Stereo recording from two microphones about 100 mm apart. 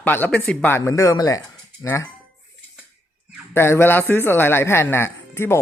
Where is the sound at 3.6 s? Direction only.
25° left (ahead or behind).